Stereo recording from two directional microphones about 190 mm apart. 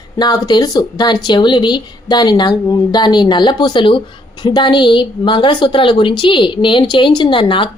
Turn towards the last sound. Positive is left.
turn(degrees=25)  # may be behind; listen again after turning